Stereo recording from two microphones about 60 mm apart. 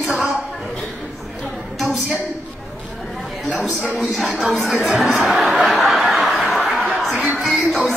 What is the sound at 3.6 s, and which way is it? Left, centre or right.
Speech, right.